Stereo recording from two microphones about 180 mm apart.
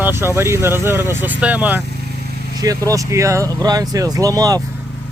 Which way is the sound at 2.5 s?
20° right (ahead or behind).